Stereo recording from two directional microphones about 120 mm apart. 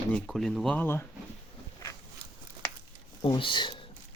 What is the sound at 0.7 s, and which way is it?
Speech, 15° left (ahead or behind).